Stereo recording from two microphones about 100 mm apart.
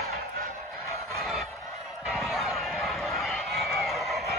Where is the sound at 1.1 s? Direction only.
Centre (ahead or behind).